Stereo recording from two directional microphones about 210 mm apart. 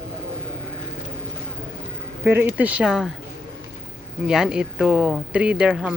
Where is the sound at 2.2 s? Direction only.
10° right (ahead or behind).